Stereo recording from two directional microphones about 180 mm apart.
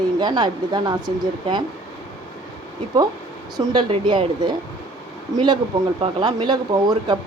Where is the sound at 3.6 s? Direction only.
25° right (ahead or behind).